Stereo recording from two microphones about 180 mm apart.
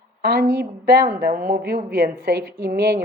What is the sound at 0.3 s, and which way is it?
Speech, 60° right (ahead or behind).